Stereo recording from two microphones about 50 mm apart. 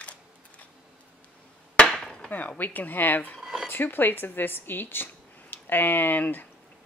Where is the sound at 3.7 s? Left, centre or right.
Left.